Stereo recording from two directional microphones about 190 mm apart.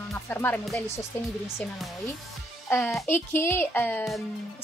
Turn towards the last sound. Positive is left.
turn(degrees=5)  # may be behind; listen again after turning